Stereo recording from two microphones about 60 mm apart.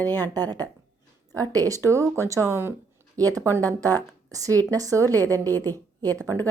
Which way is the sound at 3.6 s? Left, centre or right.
Right.